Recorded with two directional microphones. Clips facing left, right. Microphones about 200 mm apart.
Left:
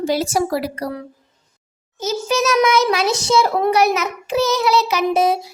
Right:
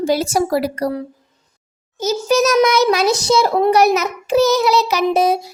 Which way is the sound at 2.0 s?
40° right (ahead or behind).